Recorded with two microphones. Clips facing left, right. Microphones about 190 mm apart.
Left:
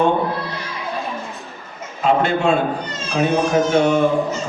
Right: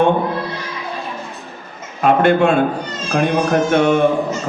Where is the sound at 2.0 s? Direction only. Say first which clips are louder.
Right 5 dB; 55° right (ahead or behind).